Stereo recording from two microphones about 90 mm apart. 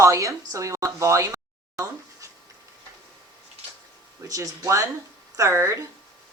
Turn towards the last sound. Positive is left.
turn(degrees=-35)  # may be behind; listen again after turning